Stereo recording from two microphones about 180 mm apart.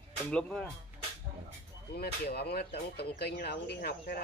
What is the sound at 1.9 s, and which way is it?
Speech, 65° left (ahead or behind).